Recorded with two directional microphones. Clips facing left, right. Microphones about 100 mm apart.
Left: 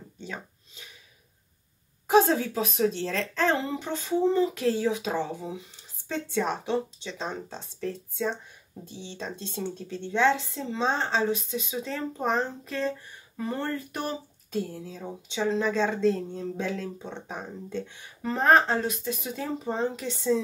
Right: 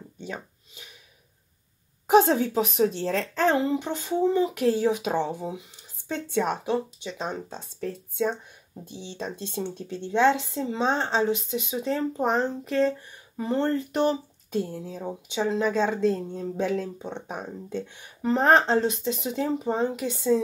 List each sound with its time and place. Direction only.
2.0 s a woman's voice: 20° right (ahead or behind)
6.4 s speech: 10° right (ahead or behind)
8.9 s a woman's voice: 20° right (ahead or behind)